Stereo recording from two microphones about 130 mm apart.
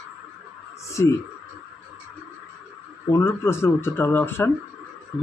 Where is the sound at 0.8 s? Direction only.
20° left (ahead or behind).